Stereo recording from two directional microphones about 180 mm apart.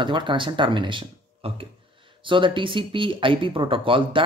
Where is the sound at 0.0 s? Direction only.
25° right (ahead or behind).